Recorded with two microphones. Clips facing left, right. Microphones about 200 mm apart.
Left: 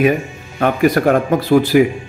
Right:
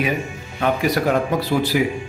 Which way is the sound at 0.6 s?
50° left (ahead or behind).